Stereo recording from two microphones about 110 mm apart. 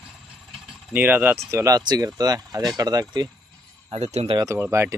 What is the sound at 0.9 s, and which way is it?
Speech, 15° right (ahead or behind).